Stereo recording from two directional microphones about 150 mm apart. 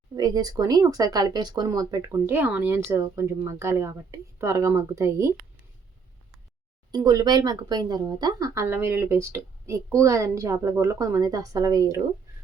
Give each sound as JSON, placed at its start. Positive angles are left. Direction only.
{"t": 0.2, "sound": "speech", "side_deg": -25}
{"t": 6.9, "sound": "speech", "side_deg": -25}